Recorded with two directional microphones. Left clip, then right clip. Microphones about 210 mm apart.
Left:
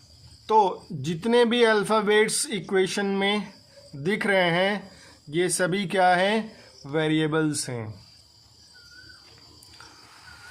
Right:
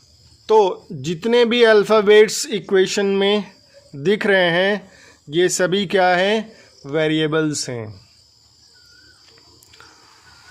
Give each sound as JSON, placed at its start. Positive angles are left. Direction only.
{"t": 0.4, "sound": "speech", "side_deg": -25}